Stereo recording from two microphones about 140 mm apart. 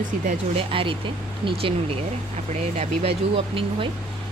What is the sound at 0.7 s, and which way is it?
Speech, 40° right (ahead or behind).